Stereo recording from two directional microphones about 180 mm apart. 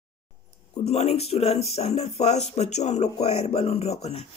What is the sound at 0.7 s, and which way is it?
Speech, 35° left (ahead or behind).